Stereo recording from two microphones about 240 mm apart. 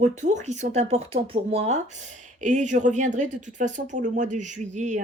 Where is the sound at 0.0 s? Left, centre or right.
Right.